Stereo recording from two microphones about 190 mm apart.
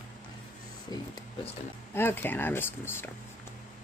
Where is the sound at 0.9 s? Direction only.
20° left (ahead or behind).